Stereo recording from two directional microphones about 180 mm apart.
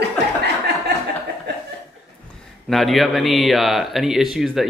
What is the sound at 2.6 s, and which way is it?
Speech, centre (ahead or behind).